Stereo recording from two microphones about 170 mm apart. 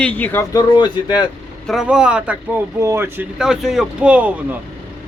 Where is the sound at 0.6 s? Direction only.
25° left (ahead or behind).